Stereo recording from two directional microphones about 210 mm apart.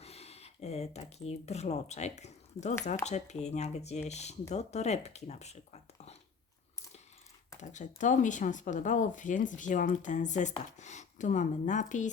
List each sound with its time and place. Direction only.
0.0 s speech: 30° left (ahead or behind)
7.6 s speech: 35° left (ahead or behind)